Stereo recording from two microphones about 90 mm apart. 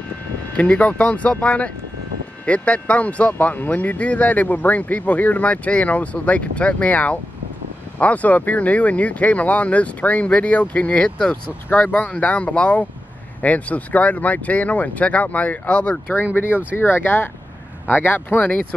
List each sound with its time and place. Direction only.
0.6 s speech: 15° left (ahead or behind)